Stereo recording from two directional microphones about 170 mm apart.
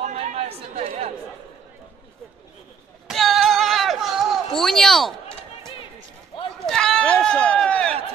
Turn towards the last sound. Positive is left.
turn(degrees=5)  # may be behind; listen again after turning